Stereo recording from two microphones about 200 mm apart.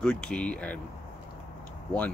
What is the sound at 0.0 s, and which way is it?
Speech, 5° left (ahead or behind).